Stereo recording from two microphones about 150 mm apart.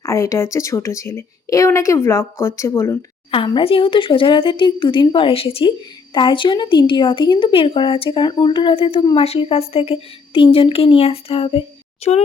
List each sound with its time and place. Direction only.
0.0 s a woman's voice: 20° left (ahead or behind)
3.3 s speech: 35° left (ahead or behind)